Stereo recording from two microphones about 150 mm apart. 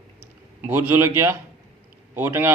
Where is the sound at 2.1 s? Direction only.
15° right (ahead or behind).